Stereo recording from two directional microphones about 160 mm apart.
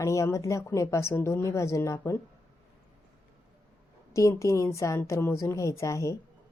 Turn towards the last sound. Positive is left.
turn(degrees=20)  # may be behind; listen again after turning